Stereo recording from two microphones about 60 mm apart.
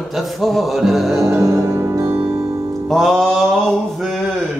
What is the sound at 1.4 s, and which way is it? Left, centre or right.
Music, right.